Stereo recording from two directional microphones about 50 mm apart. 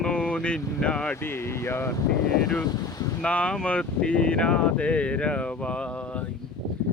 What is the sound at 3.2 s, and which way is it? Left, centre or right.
Speech, left.